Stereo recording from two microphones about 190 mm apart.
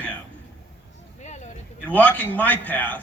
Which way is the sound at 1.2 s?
35° left (ahead or behind).